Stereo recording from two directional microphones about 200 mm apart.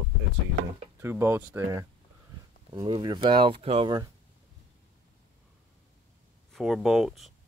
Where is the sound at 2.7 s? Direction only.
25° right (ahead or behind).